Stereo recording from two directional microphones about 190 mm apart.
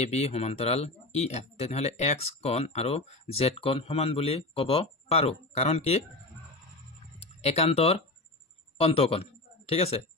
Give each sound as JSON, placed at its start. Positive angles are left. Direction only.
{"t": 0.0, "sound": "speech", "side_deg": 35}
{"t": 7.2, "sound": "speech", "side_deg": 35}